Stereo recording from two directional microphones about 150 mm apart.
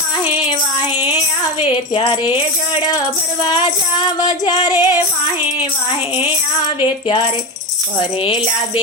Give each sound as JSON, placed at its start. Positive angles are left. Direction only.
{"t": 1.6, "sound": "speech", "side_deg": 35}
{"t": 3.4, "sound": "female singing", "side_deg": 30}
{"t": 7.9, "sound": "speech", "side_deg": 35}